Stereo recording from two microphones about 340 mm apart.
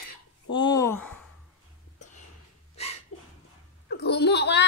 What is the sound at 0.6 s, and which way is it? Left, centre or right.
Speech, centre.